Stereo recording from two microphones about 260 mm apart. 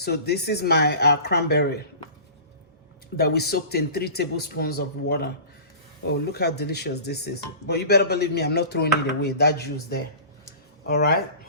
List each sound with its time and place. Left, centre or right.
0.0 s speech: left
3.2 s speech: left
10.8 s speech: left